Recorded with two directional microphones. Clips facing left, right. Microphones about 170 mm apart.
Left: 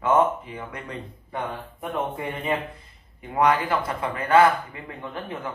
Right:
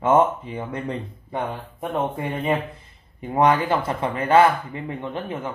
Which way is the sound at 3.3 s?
25° right (ahead or behind).